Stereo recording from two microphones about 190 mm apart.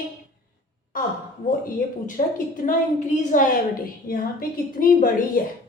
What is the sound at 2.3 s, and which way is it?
A woman's voice, 45° left (ahead or behind).